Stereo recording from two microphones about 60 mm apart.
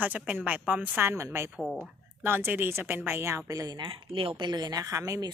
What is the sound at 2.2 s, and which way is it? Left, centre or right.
Speech, right.